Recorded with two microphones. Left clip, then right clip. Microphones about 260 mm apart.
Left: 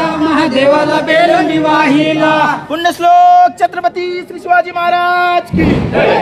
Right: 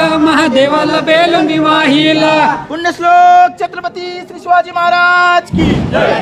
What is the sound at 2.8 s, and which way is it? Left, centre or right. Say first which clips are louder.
Speech: even; left.